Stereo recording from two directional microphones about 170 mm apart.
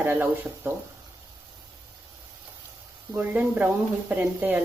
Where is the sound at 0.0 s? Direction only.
10° right (ahead or behind).